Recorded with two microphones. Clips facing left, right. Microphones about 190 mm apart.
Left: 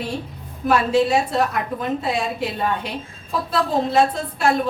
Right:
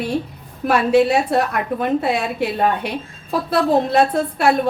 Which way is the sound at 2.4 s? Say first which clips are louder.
Right 5 dB; 65° right (ahead or behind).